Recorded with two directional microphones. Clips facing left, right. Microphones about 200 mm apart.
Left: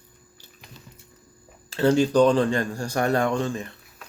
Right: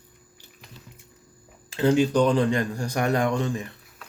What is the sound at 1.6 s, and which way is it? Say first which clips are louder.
Speech: left 1 dB; 15° right (ahead or behind).